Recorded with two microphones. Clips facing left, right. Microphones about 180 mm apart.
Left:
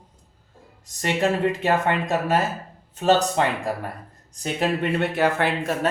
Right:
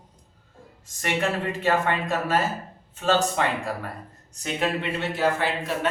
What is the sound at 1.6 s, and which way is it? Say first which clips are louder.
Speech: right 3 dB; 20° left (ahead or behind).